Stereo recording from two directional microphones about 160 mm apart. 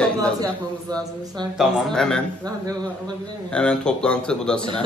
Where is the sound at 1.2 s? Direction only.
25° right (ahead or behind).